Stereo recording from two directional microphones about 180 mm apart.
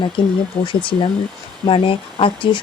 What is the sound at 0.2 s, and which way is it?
Speech, 25° left (ahead or behind).